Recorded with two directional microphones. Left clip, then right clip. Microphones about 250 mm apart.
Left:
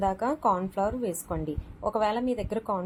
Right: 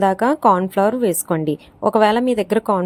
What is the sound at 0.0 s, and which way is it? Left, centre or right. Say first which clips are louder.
A woman's voice: right 11 dB; right.